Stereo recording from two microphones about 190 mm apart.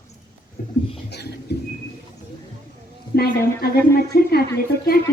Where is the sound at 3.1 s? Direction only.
55° left (ahead or behind).